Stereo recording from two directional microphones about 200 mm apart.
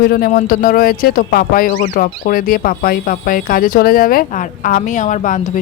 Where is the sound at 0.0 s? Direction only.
50° left (ahead or behind).